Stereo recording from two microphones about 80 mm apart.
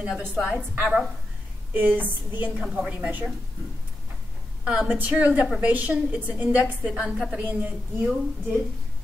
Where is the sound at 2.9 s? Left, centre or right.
Centre.